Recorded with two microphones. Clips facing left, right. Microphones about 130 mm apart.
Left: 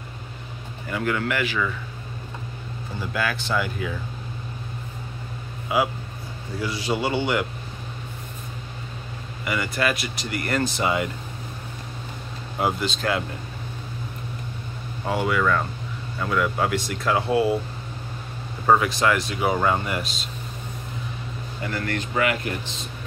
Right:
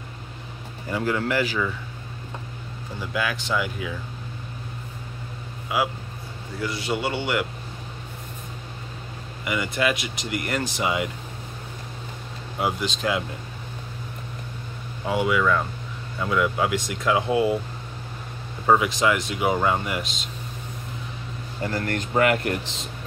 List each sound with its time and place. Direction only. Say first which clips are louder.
0.8 s speech: right 1 dB; 25° right (ahead or behind)
3.1 s speech: even; 10° right (ahead or behind)
6.9 s a man's voice: left 3 dB; centre (ahead or behind)
9.4 s speech: even; 15° right (ahead or behind)
12.8 s speech: even; 15° right (ahead or behind)
15.0 s speech: right 1 dB; 10° right (ahead or behind)
18.7 s speech: even; 15° right (ahead or behind)
21.6 s speech: right 1 dB; 40° right (ahead or behind)